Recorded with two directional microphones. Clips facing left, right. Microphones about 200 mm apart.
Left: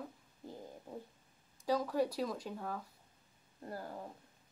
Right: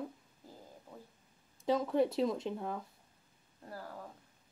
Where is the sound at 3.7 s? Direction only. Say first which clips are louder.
Left 2 dB; 20° left (ahead or behind).